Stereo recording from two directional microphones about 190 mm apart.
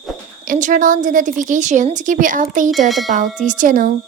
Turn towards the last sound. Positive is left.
turn(degrees=-45)  # may be behind; listen again after turning